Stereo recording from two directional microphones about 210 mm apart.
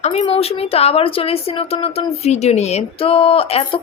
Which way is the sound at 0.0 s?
30° left (ahead or behind).